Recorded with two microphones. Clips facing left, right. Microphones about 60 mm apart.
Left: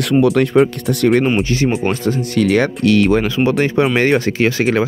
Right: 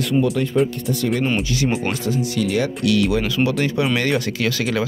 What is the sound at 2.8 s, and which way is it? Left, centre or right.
Speech, left.